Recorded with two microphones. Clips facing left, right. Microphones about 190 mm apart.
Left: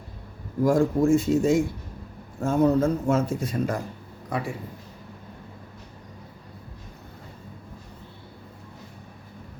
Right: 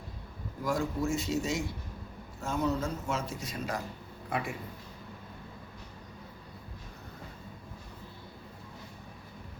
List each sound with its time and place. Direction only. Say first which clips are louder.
0.6 s speech: left 11 dB; 50° left (ahead or behind)
4.3 s a man's voice: left 5 dB; 35° left (ahead or behind)